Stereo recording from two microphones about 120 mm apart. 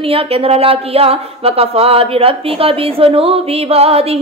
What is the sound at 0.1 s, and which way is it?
Speech, 55° right (ahead or behind).